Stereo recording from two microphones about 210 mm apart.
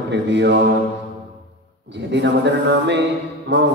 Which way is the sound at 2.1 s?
55° right (ahead or behind).